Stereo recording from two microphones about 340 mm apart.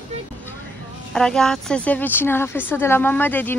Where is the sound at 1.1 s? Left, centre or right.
Centre.